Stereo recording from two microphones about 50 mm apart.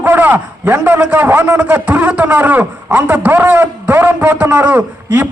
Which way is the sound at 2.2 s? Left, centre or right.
Right.